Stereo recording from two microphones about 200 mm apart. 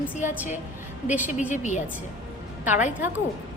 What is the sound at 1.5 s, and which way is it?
Speech, 35° left (ahead or behind).